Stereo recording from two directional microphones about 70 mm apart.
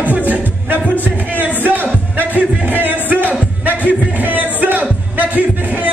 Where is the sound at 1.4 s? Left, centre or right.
Right.